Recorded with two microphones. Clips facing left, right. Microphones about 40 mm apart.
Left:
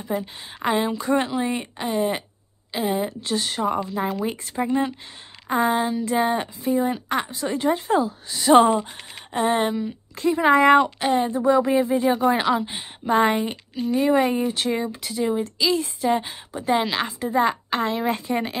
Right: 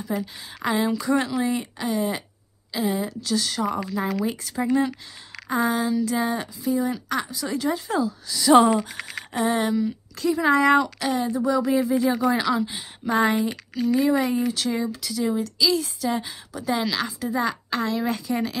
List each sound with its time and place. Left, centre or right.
0.0 s speech: left